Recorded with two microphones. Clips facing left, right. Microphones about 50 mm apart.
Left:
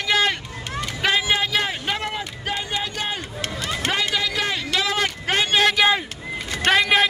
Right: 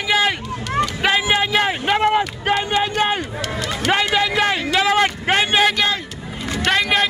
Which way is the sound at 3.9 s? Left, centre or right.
Right.